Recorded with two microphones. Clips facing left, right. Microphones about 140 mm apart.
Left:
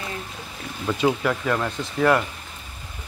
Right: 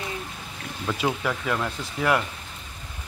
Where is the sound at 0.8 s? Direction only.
Centre (ahead or behind).